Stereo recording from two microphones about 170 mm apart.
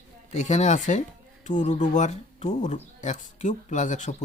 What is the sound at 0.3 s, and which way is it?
A man's voice, 45° left (ahead or behind).